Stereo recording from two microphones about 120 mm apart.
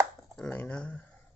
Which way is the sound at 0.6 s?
10° left (ahead or behind).